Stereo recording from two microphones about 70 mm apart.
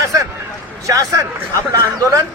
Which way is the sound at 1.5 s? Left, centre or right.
Right.